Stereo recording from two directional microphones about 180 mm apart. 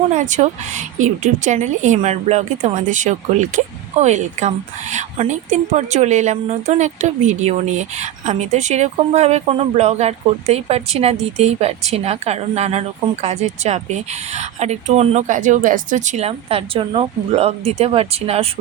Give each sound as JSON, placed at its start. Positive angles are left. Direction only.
{"t": 0.1, "sound": "a woman's voice", "side_deg": -40}